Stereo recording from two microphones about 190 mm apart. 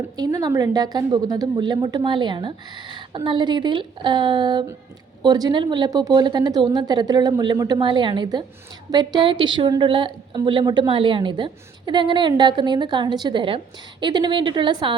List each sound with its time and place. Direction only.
0.2 s a woman's voice: 20° right (ahead or behind)